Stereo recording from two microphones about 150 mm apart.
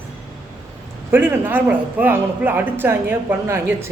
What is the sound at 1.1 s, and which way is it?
Speech, 15° right (ahead or behind).